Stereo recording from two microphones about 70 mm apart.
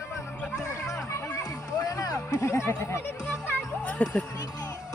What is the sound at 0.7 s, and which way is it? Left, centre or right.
Music, left.